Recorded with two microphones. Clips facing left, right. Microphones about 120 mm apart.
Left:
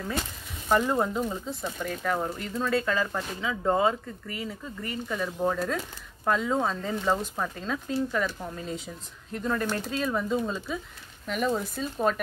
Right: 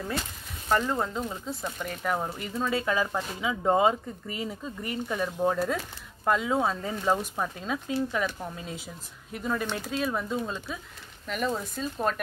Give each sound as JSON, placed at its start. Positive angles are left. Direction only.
{"t": 0.7, "sound": "speech", "side_deg": 10}